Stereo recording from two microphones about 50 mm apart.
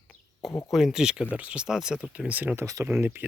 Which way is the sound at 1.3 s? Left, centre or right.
Right.